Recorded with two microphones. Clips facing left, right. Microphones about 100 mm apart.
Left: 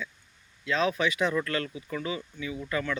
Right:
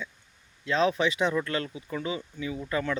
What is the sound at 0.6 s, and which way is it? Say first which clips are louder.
Speech: right 2 dB; 30° right (ahead or behind).